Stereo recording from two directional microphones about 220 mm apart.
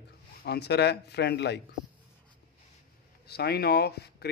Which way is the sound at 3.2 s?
45° left (ahead or behind).